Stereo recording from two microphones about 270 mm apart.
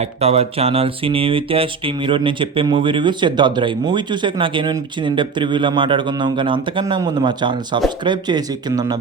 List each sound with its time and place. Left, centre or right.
0.0 s speech: right